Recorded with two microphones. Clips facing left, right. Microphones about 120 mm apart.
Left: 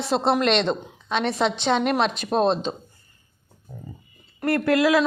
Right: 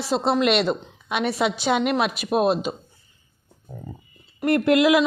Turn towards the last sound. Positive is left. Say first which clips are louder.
# right 2 dB
turn(degrees=-20)  # may be behind; listen again after turning